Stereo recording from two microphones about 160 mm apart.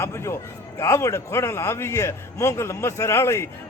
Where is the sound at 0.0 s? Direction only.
15° left (ahead or behind).